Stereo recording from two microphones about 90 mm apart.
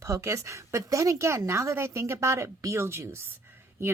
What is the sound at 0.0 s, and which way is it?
Speech, 30° right (ahead or behind).